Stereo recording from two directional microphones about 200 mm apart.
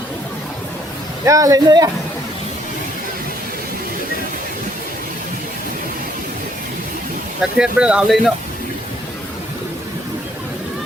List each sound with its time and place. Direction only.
1.2 s speech: 15° right (ahead or behind)
7.5 s speech: 5° right (ahead or behind)